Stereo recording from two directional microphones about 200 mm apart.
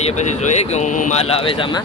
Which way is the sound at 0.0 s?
35° left (ahead or behind).